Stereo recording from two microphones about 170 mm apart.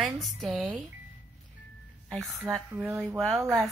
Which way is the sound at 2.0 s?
Centre (ahead or behind).